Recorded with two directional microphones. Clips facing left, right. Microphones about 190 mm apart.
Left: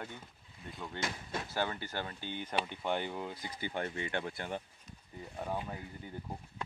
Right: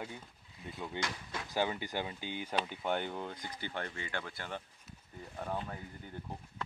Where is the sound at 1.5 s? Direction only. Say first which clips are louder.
Right 3 dB; 15° right (ahead or behind).